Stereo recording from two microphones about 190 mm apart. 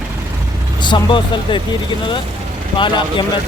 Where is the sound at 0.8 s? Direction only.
25° left (ahead or behind).